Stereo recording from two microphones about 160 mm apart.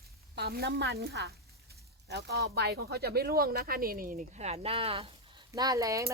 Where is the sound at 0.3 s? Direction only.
85° right; by 5.1 s 35° right (ahead or behind).